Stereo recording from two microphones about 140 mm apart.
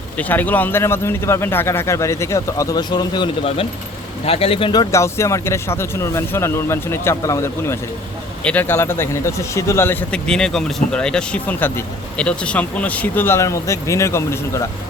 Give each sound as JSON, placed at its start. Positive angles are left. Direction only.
{"t": 0.2, "sound": "speech", "side_deg": 10}
{"t": 4.3, "sound": "speech", "side_deg": 45}
{"t": 4.7, "sound": "speech", "side_deg": 25}